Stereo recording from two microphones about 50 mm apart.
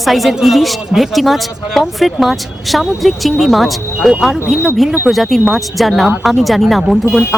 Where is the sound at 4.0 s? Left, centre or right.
Centre.